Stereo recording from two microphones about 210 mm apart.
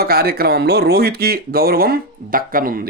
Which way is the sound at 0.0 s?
45° right (ahead or behind).